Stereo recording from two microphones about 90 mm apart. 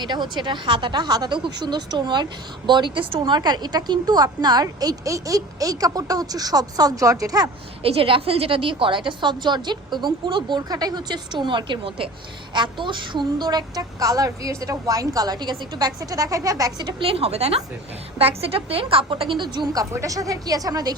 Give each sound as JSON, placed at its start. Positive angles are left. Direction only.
{"t": 0.0, "sound": "a woman's voice", "side_deg": -55}
{"t": 7.8, "sound": "a woman's voice", "side_deg": -90}
{"t": 12.5, "sound": "a woman's voice", "side_deg": -60}
{"t": 17.0, "sound": "a woman's voice", "side_deg": -90}
{"t": 19.7, "sound": "speech", "side_deg": -35}